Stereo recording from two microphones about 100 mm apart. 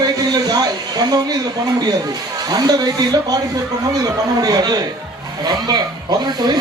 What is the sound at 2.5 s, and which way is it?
Speech, 40° right (ahead or behind).